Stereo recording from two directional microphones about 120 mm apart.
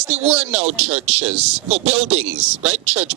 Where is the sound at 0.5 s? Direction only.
65° right (ahead or behind).